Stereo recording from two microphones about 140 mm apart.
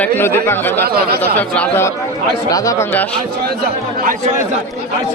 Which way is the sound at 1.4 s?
10° left (ahead or behind).